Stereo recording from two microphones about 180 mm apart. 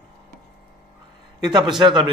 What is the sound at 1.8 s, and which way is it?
Speech, 25° right (ahead or behind).